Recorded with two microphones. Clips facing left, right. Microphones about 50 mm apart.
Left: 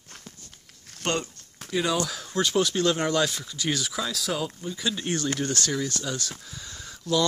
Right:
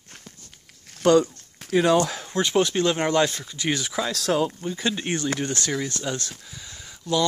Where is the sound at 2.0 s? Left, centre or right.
Right.